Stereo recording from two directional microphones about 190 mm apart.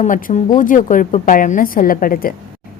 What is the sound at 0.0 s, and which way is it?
A woman's voice, 40° left (ahead or behind).